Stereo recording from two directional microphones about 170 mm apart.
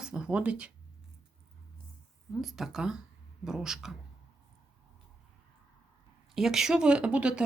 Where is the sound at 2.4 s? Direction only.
Centre (ahead or behind).